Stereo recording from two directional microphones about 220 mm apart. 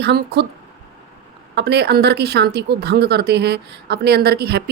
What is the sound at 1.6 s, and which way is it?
A woman's voice, 50° right (ahead or behind).